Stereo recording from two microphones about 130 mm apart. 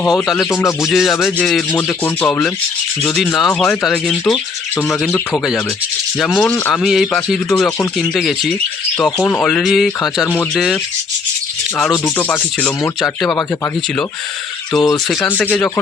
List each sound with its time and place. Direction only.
0.3 s speech: 25° left (ahead or behind)
0.8 s speech: centre (ahead or behind)
3.2 s speech: centre (ahead or behind)
6.1 s rub: 5° left (ahead or behind)
6.8 s speech: centre (ahead or behind)
9.1 s speech: 10° left (ahead or behind)
12.0 s rub: 10° left (ahead or behind)
13.0 s speech: 5° left (ahead or behind)
14.7 s speech: 5° left (ahead or behind)